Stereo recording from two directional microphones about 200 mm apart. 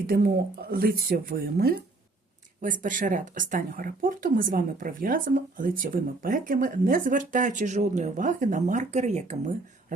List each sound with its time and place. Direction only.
0.1 s speech: 45° right (ahead or behind)
2.6 s speech: 40° right (ahead or behind)